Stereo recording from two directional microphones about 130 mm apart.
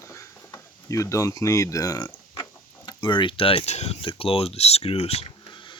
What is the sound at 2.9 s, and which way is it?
Speech, 40° left (ahead or behind).